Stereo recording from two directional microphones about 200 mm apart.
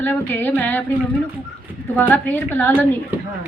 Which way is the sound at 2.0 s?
10° left (ahead or behind).